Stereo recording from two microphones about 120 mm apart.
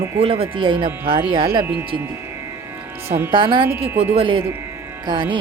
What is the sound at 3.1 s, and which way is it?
Speech, 20° right (ahead or behind).